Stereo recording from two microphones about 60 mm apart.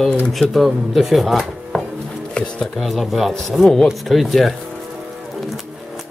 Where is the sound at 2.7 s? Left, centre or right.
Centre.